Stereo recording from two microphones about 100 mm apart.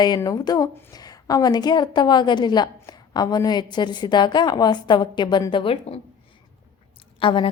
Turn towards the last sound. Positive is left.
turn(degrees=60)  # may be behind; listen again after turning